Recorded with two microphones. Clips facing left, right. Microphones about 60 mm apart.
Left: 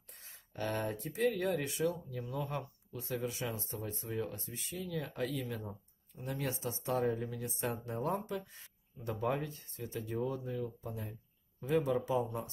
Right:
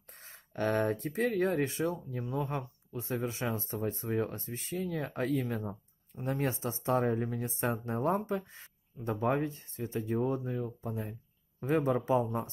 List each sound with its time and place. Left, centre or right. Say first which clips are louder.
0.2 s speech: right 6 dB; right